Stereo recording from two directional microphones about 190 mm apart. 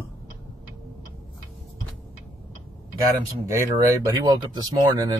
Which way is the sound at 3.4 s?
15° right (ahead or behind).